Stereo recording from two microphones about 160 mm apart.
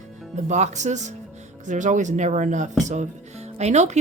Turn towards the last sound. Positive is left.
turn(degrees=-45)  # may be behind; listen again after turning